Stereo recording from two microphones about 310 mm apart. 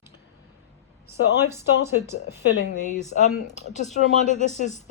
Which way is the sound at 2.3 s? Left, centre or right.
Left.